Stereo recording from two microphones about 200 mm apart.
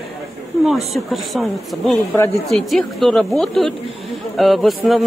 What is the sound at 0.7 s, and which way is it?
Speech, centre (ahead or behind).